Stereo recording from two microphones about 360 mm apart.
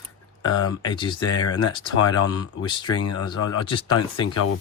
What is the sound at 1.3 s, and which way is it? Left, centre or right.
Speech, left.